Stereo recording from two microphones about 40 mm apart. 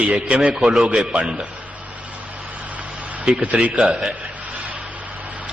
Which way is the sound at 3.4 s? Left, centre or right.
Right.